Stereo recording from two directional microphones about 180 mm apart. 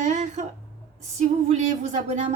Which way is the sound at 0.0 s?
40° right (ahead or behind).